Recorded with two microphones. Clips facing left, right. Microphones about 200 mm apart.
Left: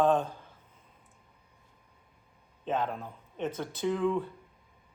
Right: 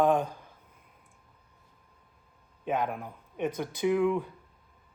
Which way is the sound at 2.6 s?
15° right (ahead or behind).